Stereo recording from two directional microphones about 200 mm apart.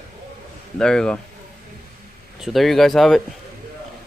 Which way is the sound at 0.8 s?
5° left (ahead or behind).